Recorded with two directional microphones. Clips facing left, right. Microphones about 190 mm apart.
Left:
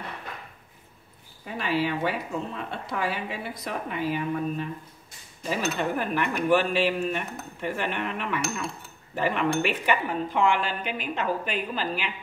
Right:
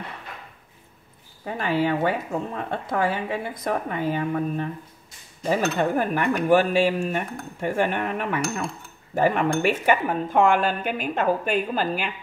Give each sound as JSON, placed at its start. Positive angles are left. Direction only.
{"t": 1.4, "sound": "speech", "side_deg": -50}